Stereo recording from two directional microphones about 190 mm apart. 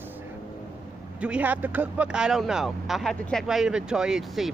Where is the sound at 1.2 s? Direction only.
5° right (ahead or behind).